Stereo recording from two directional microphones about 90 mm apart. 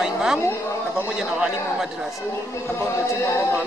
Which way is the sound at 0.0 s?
5° right (ahead or behind).